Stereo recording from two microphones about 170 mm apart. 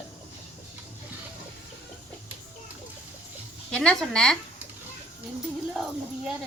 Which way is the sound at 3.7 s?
5° left (ahead or behind).